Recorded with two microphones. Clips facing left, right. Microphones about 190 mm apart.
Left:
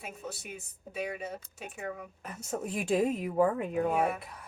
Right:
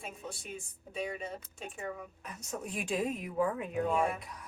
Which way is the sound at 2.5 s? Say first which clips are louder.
Left 6 dB; 45° left (ahead or behind).